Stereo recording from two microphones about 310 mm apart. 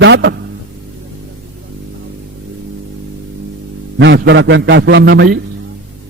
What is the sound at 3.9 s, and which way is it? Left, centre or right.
A man's voice, right.